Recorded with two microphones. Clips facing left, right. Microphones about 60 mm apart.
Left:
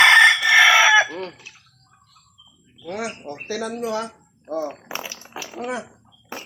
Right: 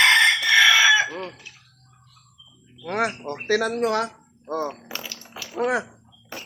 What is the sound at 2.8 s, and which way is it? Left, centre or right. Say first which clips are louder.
Speech: right 4 dB; right.